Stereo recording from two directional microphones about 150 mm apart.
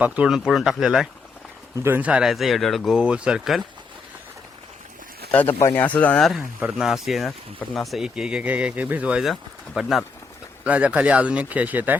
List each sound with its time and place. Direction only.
0.0 s speech: 5° right (ahead or behind)
5.3 s speech: 10° left (ahead or behind)
5.5 s speech: 20° left (ahead or behind)
5.8 s speech: 10° left (ahead or behind); by 11.9 s 10° right (ahead or behind)